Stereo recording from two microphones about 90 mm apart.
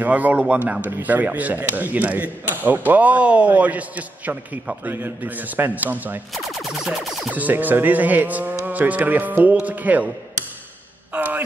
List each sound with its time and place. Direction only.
0.0 s a man's voice: 15° right (ahead or behind)
6.3 s music: centre (ahead or behind)
7.2 s speech: 20° right (ahead or behind)
11.1 s a sound: 20° right (ahead or behind)